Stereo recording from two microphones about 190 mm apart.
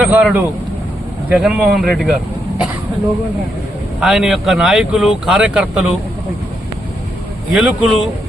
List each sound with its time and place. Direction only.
0.0 s speech: 5° right (ahead or behind)
4.0 s speech: 5° right (ahead or behind)
7.5 s speech: centre (ahead or behind)